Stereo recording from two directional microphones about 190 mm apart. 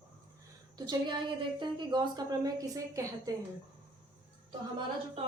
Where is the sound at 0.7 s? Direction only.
25° right (ahead or behind).